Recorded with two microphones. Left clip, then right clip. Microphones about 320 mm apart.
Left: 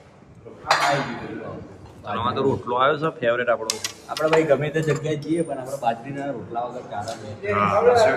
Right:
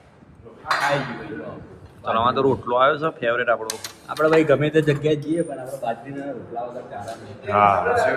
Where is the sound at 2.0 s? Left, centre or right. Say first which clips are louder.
Right 4 dB; centre.